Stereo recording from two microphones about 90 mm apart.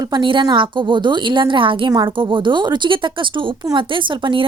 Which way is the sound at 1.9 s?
50° right (ahead or behind).